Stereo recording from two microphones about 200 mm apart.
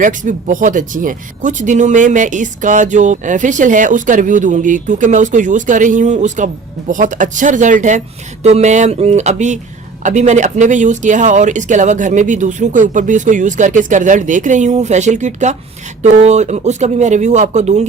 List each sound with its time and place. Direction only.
0.0 s speech: 40° right (ahead or behind)